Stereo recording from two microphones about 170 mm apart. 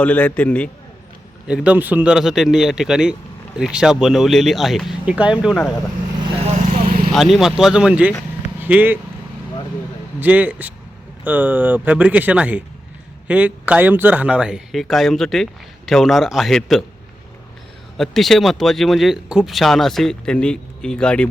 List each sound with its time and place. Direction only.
0.0 s a man's voice: 10° left (ahead or behind)
1.5 s speech: 5° right (ahead or behind)
6.5 s vehicle: 45° right (ahead or behind)
7.1 s speech: centre (ahead or behind)
10.2 s speech: 10° right (ahead or behind)
17.9 s speech: centre (ahead or behind)